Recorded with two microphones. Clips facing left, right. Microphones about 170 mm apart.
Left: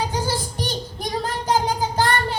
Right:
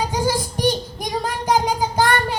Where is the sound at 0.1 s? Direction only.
10° right (ahead or behind).